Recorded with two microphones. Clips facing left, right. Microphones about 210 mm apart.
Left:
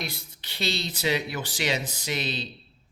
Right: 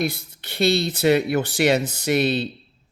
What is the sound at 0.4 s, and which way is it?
Speech, 50° right (ahead or behind).